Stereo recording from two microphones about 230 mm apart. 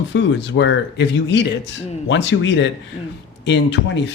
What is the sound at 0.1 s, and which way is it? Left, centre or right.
Speech, left.